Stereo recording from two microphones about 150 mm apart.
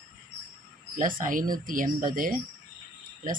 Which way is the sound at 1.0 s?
65° right (ahead or behind).